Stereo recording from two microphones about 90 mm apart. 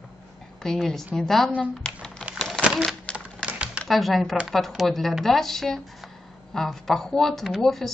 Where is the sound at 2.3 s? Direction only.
5° left (ahead or behind).